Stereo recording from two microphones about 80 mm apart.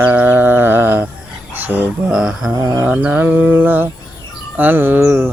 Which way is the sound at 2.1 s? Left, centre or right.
Centre.